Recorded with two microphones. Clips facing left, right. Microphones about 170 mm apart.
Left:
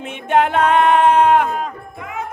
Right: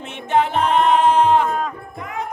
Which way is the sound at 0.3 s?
55° left (ahead or behind).